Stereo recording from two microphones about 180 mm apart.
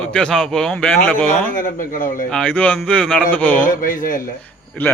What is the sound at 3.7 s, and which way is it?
Speech, 50° left (ahead or behind).